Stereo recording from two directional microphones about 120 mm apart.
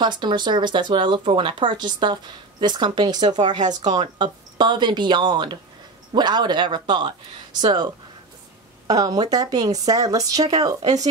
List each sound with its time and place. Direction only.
0.0 s speech: 40° right (ahead or behind)